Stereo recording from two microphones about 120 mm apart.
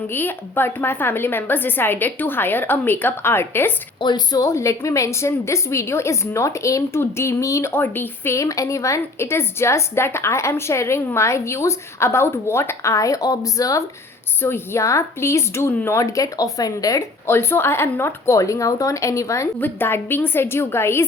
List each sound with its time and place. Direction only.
0.1 s a woman's voice: 15° left (ahead or behind)
4.0 s a woman's voice: 35° left (ahead or behind)